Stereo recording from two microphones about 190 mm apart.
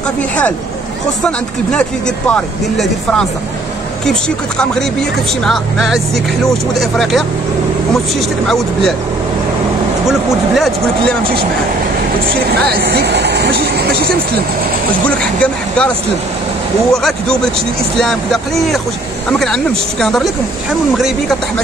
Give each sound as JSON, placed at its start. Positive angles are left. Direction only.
{"t": 1.2, "sound": "speech", "side_deg": 5}
{"t": 10.0, "sound": "speech", "side_deg": 0}
{"t": 12.3, "sound": "speech", "side_deg": -55}
{"t": 15.0, "sound": "speech", "side_deg": 5}
{"t": 16.9, "sound": "speech", "side_deg": 5}